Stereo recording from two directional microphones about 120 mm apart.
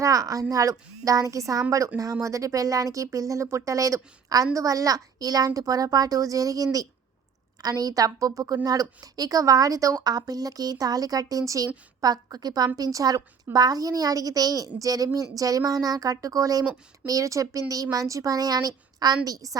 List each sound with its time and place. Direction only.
0.0 s a woman's voice: 30° right (ahead or behind)